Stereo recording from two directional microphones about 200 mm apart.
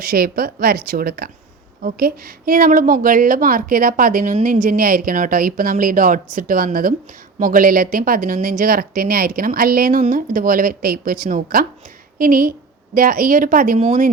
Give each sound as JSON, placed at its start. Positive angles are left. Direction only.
{"t": 0.0, "sound": "a woman's voice", "side_deg": -50}